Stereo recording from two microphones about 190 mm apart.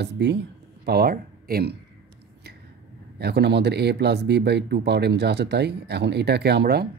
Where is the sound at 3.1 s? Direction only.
60° right (ahead or behind).